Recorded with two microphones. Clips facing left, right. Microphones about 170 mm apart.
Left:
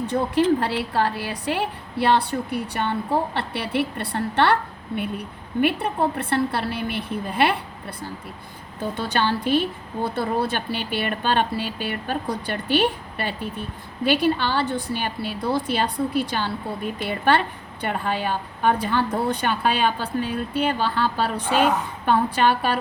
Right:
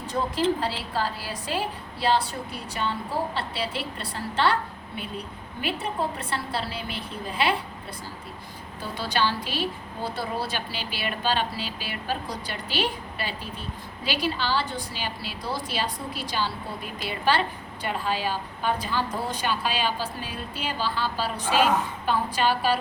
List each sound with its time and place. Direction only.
0.6 s a woman's voice: 60° left (ahead or behind)
8.8 s a woman's voice: 55° left (ahead or behind)